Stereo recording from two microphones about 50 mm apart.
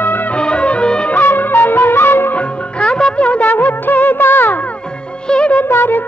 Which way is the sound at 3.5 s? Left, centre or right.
Left.